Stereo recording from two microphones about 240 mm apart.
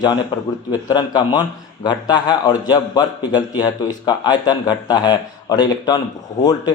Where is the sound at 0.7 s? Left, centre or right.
Centre.